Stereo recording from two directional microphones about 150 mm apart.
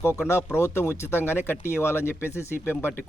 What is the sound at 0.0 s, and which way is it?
Speech, 15° left (ahead or behind).